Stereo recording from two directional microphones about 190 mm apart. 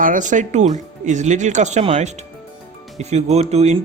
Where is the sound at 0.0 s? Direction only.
45° right (ahead or behind).